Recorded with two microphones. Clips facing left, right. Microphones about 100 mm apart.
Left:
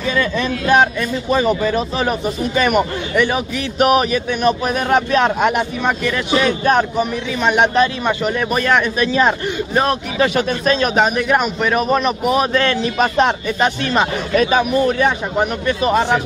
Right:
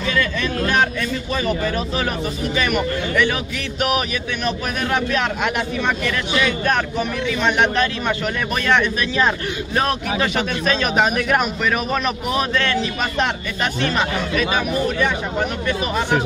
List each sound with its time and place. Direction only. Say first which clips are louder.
0.1 s speech: left 3 dB; 25° left (ahead or behind)
3.8 s speech: left 7 dB; 35° left (ahead or behind)
4.4 s speech: left 6 dB; 20° left (ahead or behind)
5.1 s speech: left 6 dB; 35° left (ahead or behind)
10.2 s speech: left 6 dB; 5° left (ahead or behind)
12.5 s speech: left 5 dB; 40° left (ahead or behind)
14.9 s speech: left 4 dB; 40° left (ahead or behind)
15.9 s a man's voice: left 6 dB; 55° left (ahead or behind)